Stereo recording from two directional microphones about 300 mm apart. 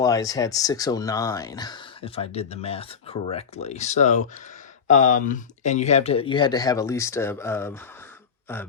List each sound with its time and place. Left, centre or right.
0.0 s speech: centre